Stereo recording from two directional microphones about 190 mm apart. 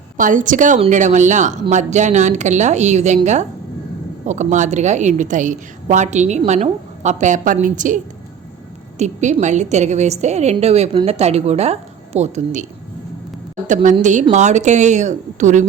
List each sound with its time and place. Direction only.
0.2 s a woman's voice: 45° right (ahead or behind)
4.3 s a woman's voice: 40° right (ahead or behind)
14.0 s a woman's voice: 40° right (ahead or behind)